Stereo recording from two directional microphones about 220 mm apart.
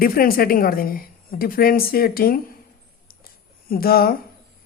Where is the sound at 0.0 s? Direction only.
40° left (ahead or behind).